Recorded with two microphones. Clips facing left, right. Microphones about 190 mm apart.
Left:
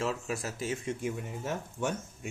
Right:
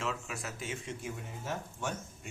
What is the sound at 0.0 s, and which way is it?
Speech, 35° left (ahead or behind).